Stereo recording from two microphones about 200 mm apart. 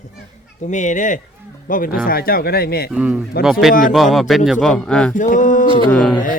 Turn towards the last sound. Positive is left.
turn(degrees=5)  # may be behind; listen again after turning